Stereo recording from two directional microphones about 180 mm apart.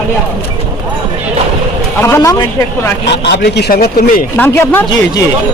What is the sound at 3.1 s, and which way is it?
Speech, 70° left (ahead or behind).